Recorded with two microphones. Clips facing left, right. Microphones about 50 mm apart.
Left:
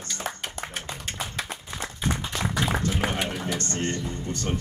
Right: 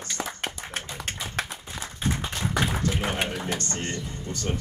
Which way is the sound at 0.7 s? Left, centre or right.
Right.